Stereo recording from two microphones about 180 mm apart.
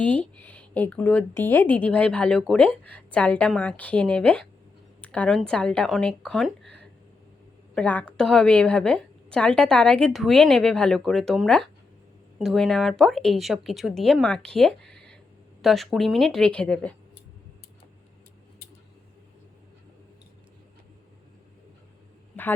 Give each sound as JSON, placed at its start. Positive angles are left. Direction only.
{"t": 0.0, "sound": "a woman's voice", "side_deg": 10}
{"t": 6.6, "sound": "a sound", "side_deg": -70}
{"t": 7.8, "sound": "a woman's voice", "side_deg": 10}